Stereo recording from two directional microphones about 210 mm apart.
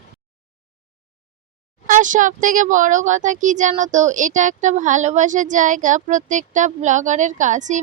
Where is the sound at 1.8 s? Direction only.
40° right (ahead or behind).